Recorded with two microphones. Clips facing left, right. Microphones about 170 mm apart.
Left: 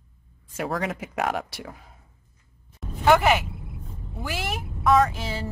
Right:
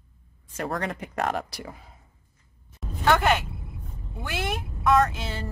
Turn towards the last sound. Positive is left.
turn(degrees=5)  # may be behind; listen again after turning